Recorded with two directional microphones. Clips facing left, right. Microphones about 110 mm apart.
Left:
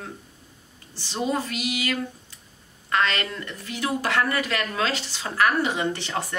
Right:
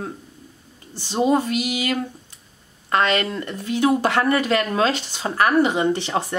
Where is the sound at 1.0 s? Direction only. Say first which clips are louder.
Right 7 dB; 20° right (ahead or behind).